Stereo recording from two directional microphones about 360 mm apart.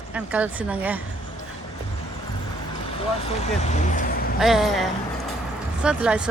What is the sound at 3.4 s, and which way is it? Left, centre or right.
Speech, centre.